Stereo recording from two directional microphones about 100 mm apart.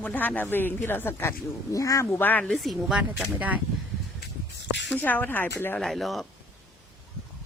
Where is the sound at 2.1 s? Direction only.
20° left (ahead or behind).